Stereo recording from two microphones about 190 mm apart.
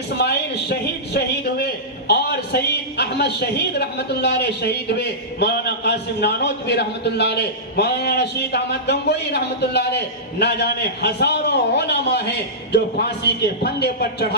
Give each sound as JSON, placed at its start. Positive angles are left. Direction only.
{"t": 0.2, "sound": "a man's voice", "side_deg": 60}